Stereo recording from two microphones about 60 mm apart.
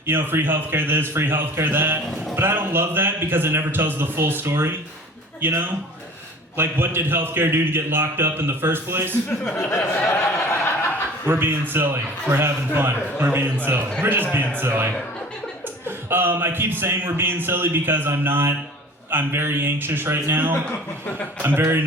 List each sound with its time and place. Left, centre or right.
0.0 s a man's voice: right
9.6 s a sound: left
11.3 s a man's voice: right
16.0 s a man's voice: right
21.6 s speech: right